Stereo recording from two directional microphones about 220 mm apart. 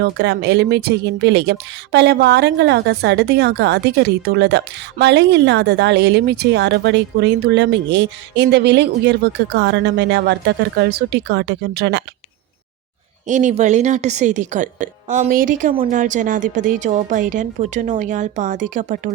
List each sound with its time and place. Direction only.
0.0 s speech: 50° right (ahead or behind)
13.2 s a woman's voice: 35° right (ahead or behind)